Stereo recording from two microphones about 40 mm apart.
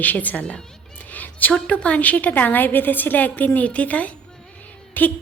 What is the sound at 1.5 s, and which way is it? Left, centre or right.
A woman's voice, left.